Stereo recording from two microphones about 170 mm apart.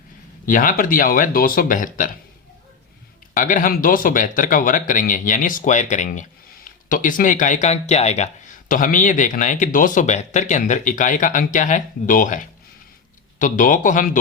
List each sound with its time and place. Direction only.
0.4 s speech: 55° left (ahead or behind)
3.3 s speech: 50° left (ahead or behind)
8.7 s speech: 50° left (ahead or behind)